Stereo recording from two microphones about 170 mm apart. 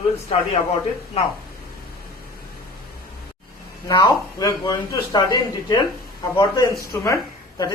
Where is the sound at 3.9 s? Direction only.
20° left (ahead or behind).